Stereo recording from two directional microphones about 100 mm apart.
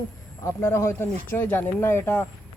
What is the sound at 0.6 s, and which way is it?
Speech, 25° left (ahead or behind).